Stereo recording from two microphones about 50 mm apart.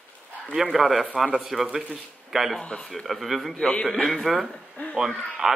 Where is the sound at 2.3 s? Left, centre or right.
Centre.